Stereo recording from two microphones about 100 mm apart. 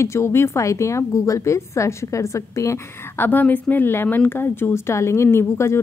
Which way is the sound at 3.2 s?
15° left (ahead or behind).